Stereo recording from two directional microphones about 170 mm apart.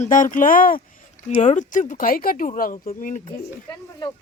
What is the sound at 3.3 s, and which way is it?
Speech, 25° left (ahead or behind).